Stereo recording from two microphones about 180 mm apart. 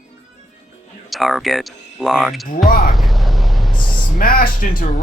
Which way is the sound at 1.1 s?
Centre (ahead or behind).